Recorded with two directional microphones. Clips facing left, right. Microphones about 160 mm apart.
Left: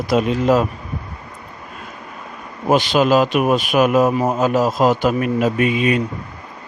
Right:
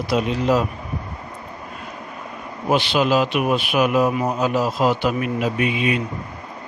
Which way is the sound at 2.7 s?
45° left (ahead or behind).